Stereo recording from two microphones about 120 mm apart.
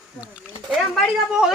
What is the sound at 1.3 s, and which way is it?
Speech, 5° right (ahead or behind).